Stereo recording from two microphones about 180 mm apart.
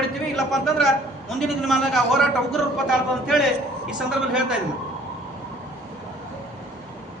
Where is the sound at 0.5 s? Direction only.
Centre (ahead or behind).